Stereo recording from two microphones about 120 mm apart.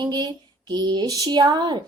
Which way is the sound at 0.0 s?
35° right (ahead or behind).